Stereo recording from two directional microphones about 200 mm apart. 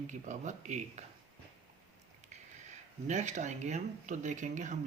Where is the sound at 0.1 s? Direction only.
40° right (ahead or behind).